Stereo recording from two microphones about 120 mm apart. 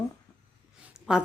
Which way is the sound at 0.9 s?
5° right (ahead or behind).